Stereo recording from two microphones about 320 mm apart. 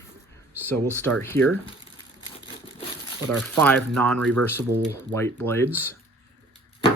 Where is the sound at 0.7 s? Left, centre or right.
Centre.